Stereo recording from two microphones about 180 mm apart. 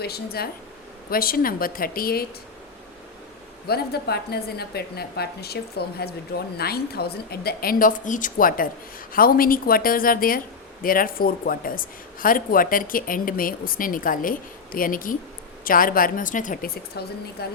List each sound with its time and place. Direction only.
0.0 s a woman's voice: 60° left (ahead or behind)
3.7 s a woman's voice: 60° left (ahead or behind)